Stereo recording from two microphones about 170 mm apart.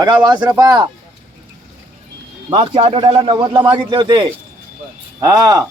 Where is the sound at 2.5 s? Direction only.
30° right (ahead or behind).